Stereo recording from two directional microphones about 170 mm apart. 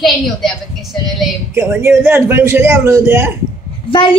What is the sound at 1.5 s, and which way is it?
A man's voice, 15° right (ahead or behind).